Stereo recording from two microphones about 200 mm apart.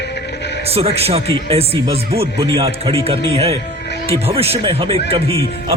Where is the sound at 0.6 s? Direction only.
30° right (ahead or behind).